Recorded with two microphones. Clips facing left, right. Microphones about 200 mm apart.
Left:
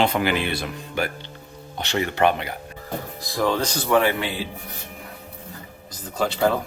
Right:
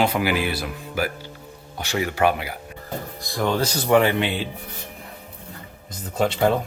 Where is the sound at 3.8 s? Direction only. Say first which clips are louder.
Right 2 dB; 20° right (ahead or behind).